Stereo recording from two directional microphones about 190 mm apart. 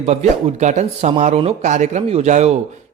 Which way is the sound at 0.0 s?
35° right (ahead or behind).